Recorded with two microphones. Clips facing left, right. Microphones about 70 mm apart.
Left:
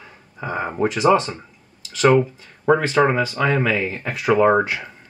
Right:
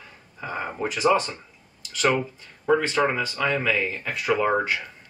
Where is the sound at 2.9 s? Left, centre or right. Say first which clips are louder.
Left 6 dB; centre.